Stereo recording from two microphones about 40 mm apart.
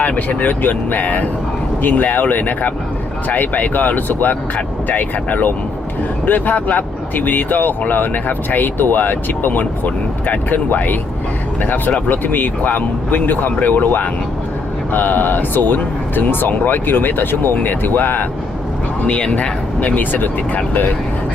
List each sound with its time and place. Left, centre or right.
0.0 s speech: left
19.0 s speech: left
20.0 s speech: left